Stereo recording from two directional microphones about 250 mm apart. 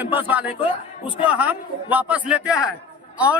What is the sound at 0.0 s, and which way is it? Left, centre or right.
A man's voice, centre.